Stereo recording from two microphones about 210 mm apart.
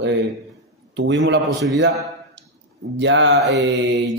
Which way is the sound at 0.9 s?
60° right (ahead or behind).